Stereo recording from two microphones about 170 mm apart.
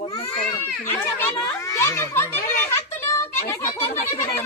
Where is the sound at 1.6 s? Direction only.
15° left (ahead or behind).